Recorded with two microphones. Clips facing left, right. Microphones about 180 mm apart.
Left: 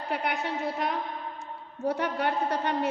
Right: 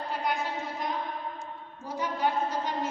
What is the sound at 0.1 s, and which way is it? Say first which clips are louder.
A woman's voice: left 2 dB; 65° left (ahead or behind).